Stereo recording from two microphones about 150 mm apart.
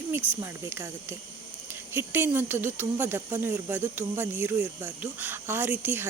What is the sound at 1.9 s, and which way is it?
Speech, 15° right (ahead or behind).